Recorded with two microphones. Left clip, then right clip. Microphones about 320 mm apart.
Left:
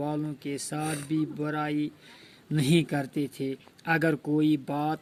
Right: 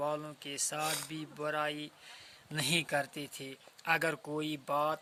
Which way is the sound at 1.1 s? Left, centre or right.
Right.